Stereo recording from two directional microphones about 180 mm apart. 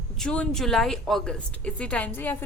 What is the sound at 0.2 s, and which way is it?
A woman's voice, 5° left (ahead or behind).